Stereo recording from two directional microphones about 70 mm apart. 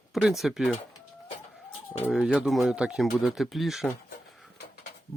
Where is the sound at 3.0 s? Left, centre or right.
Centre.